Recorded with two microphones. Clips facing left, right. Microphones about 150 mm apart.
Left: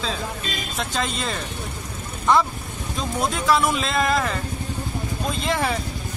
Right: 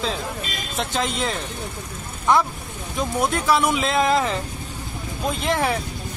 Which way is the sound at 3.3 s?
15° right (ahead or behind).